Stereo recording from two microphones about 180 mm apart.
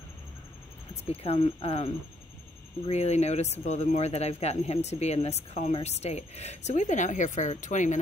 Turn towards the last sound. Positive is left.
turn(degrees=45)  # may be behind; listen again after turning